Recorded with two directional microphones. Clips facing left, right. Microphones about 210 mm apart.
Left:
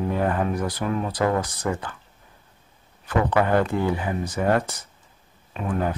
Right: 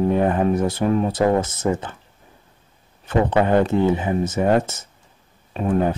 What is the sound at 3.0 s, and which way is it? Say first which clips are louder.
Speech: right 3 dB; 25° right (ahead or behind).